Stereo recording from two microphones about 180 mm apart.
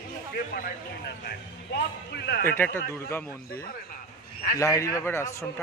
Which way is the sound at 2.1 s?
65° left (ahead or behind).